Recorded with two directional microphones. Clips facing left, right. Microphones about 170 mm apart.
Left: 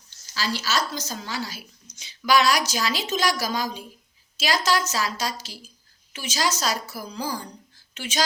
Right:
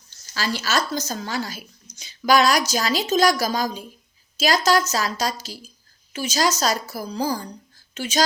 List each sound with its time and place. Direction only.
0.1 s speech: 50° right (ahead or behind)